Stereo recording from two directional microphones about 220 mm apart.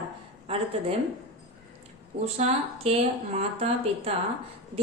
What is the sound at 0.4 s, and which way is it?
Speech, 25° right (ahead or behind).